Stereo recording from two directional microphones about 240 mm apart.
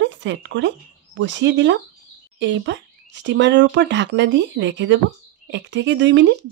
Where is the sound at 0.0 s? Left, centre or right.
Right.